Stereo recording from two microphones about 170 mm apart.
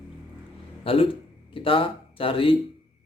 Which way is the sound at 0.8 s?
35° left (ahead or behind).